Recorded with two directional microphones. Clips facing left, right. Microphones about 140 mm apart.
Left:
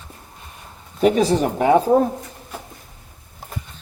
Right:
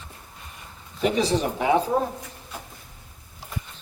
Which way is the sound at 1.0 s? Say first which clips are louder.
Left 6 dB; 45° left (ahead or behind).